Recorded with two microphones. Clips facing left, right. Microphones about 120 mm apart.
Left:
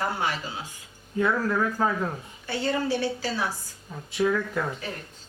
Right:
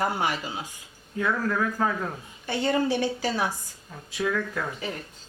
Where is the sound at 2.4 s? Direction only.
15° right (ahead or behind).